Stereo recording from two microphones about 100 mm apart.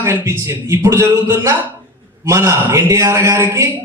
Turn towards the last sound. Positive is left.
turn(degrees=-30)  # may be behind; listen again after turning